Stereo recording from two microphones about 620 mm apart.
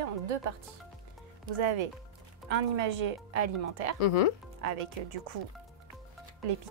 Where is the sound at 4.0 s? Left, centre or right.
Left.